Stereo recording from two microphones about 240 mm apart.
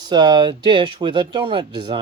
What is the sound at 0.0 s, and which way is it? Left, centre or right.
Speech, centre.